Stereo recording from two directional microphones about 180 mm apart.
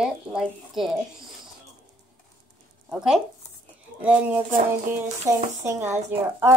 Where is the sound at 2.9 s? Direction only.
5° right (ahead or behind).